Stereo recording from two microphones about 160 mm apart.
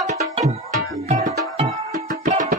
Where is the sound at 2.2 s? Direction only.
50° right (ahead or behind).